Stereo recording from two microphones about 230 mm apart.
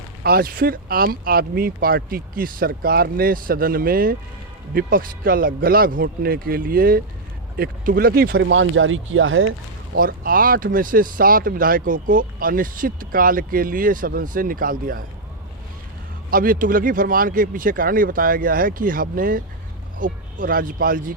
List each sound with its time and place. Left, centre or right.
0.2 s speech: right
10.0 s speech: right
16.3 s speech: right